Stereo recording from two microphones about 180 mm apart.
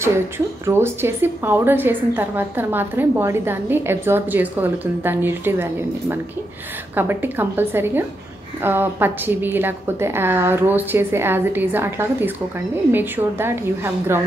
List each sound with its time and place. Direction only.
0.7 s a woman's voice: 15° right (ahead or behind)